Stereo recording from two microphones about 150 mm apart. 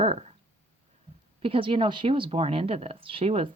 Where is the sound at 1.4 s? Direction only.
35° right (ahead or behind).